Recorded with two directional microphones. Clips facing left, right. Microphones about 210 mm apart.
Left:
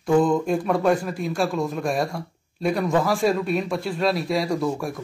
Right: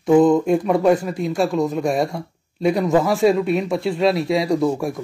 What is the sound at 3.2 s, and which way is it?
Speech, centre (ahead or behind).